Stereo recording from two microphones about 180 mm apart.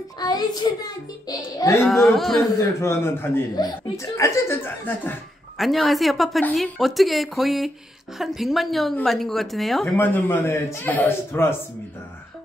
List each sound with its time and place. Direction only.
0.2 s a child's voice: 20° left (ahead or behind)
2.0 s a woman's voice: centre (ahead or behind)
2.8 s speech: 15° left (ahead or behind)
5.6 s a woman's voice: centre (ahead or behind)
9.9 s speech: 10° left (ahead or behind)